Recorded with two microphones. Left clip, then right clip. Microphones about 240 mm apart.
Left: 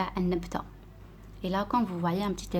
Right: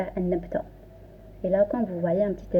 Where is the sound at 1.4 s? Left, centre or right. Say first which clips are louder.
Right 6 dB; left.